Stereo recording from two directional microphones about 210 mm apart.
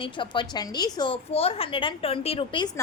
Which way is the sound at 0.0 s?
20° left (ahead or behind).